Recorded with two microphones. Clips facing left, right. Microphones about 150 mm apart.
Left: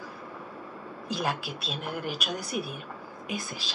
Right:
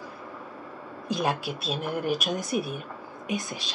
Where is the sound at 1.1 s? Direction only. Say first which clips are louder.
Right 4 dB; 20° right (ahead or behind).